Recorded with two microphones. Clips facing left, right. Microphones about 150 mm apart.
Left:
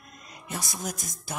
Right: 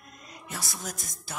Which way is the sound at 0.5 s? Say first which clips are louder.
Left 4 dB; 15° left (ahead or behind).